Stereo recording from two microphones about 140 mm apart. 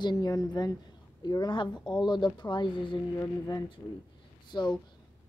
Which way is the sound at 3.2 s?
25° left (ahead or behind).